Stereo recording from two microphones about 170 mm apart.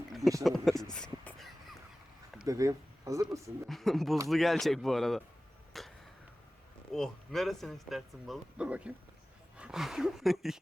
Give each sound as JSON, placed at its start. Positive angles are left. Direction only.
{"t": 0.2, "sound": "speech", "side_deg": -20}
{"t": 0.4, "sound": "speech", "side_deg": 0}
{"t": 0.9, "sound": "a sound", "side_deg": 5}
{"t": 2.4, "sound": "speech", "side_deg": -20}
{"t": 3.7, "sound": "speech", "side_deg": 0}
{"t": 5.7, "sound": "a sound", "side_deg": 0}
{"t": 6.9, "sound": "speech", "side_deg": 0}